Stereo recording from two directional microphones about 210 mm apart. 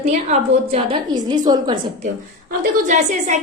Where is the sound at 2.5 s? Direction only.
40° right (ahead or behind).